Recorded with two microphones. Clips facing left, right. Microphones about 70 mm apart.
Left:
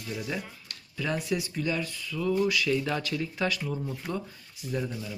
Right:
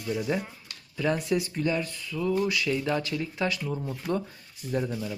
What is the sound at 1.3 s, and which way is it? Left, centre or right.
Speech, centre.